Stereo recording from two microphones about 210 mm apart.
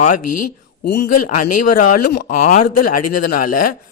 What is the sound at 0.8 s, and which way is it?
A man's voice, 50° left (ahead or behind).